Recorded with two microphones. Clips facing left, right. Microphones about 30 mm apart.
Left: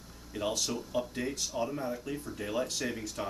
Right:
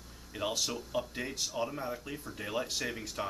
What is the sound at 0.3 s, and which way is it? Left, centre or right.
Speech, centre.